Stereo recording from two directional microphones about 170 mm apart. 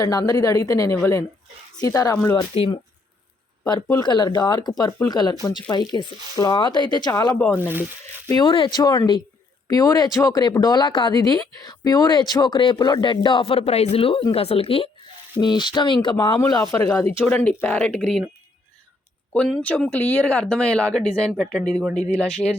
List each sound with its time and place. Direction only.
0.0 s speech: 20° left (ahead or behind)
3.8 s speech: 20° left (ahead or behind)
7.3 s speech: 10° left (ahead or behind)
8.3 s speech: 25° left (ahead or behind); by 18.2 s 10° left (ahead or behind)
19.3 s speech: 5° left (ahead or behind)